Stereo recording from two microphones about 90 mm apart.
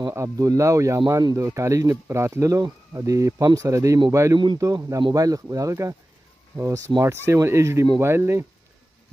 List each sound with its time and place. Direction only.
0.1 s speech: 35° right (ahead or behind)